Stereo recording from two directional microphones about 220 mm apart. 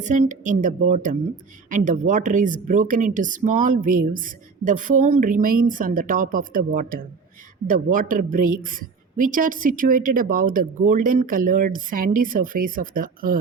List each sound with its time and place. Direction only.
0.0 s speech: 35° right (ahead or behind)